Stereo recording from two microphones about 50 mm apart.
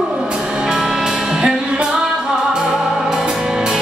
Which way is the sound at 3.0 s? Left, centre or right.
Centre.